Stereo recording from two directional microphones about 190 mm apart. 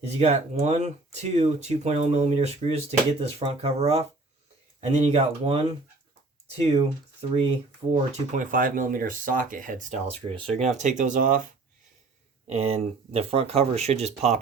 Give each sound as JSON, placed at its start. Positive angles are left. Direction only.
{"t": 0.0, "sound": "speech", "side_deg": -35}
{"t": 12.5, "sound": "speech", "side_deg": -30}